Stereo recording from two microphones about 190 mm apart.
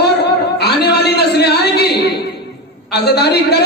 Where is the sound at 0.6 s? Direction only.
60° left (ahead or behind).